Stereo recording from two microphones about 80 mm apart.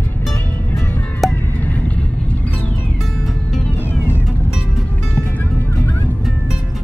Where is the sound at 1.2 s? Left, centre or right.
Centre.